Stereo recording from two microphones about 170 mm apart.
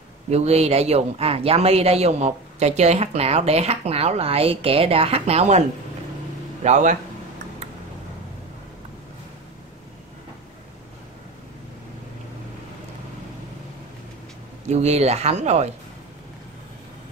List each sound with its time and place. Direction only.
0.3 s speech: 40° right (ahead or behind)
6.6 s a man's voice: 45° right (ahead or behind)
14.7 s speech: 40° right (ahead or behind)